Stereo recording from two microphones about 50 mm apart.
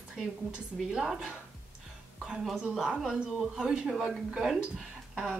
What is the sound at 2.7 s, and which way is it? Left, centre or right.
Speech, centre.